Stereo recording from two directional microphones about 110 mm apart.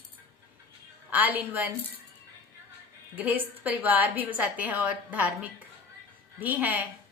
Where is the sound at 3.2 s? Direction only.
15° right (ahead or behind).